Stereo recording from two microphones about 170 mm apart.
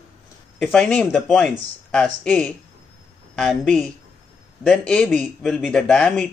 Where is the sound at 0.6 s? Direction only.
5° left (ahead or behind).